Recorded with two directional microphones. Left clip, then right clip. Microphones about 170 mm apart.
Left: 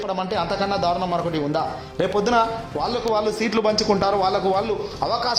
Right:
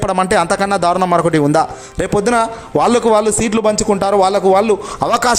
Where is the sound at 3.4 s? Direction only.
30° right (ahead or behind).